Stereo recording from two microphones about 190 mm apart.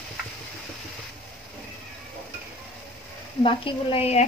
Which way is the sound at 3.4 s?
30° left (ahead or behind).